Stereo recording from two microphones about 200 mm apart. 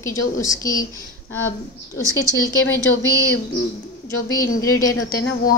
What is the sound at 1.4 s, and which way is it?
Speech, 80° left.